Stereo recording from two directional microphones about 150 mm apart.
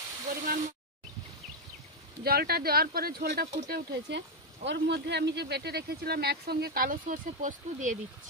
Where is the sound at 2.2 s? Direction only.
90° right.